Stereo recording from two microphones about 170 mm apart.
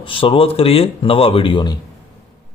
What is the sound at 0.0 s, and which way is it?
Speech, 30° left (ahead or behind).